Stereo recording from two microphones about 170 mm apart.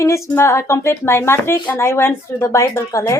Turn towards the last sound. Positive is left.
turn(degrees=20)  # may be behind; listen again after turning